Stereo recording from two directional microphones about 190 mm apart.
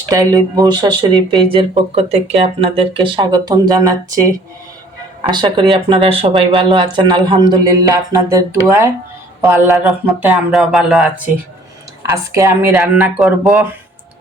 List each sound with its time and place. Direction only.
0.1 s speech: 20° right (ahead or behind)
5.3 s speech: 25° right (ahead or behind); by 11.2 s centre (ahead or behind)
12.1 s speech: 15° right (ahead or behind)